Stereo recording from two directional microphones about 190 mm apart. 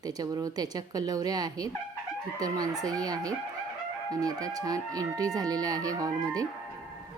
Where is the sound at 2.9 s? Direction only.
20° right (ahead or behind).